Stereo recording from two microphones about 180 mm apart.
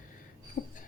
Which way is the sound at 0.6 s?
45° left (ahead or behind).